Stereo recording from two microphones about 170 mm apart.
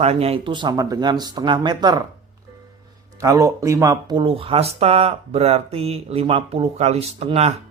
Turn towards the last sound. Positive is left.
turn(degrees=-35)  # may be behind; listen again after turning